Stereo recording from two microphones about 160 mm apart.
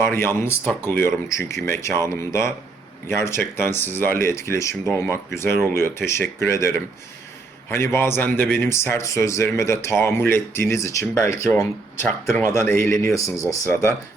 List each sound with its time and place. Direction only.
0.1 s a man's voice: 15° left (ahead or behind)